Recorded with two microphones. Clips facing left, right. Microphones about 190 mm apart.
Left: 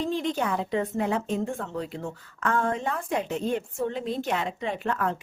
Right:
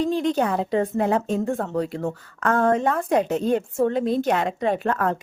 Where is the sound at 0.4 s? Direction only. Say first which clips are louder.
Right 5 dB; 35° right (ahead or behind).